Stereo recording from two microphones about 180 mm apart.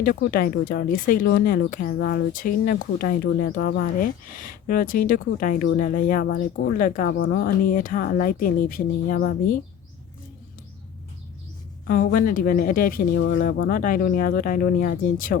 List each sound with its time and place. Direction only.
0.0 s speech: 55° left (ahead or behind)
4.0 s speech: 50° left (ahead or behind)
6.2 s speech: 70° left (ahead or behind); by 7.1 s 50° left (ahead or behind)
7.1 s speech: 75° left (ahead or behind); by 9.6 s 55° left (ahead or behind)
11.9 s speech: 55° left (ahead or behind)